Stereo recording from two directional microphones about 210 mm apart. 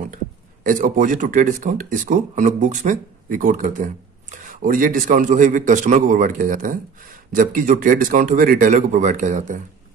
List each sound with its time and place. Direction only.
0.7 s speech: 40° right (ahead or behind)